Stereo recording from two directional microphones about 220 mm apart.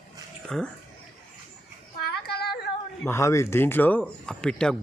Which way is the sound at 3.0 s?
10° left (ahead or behind).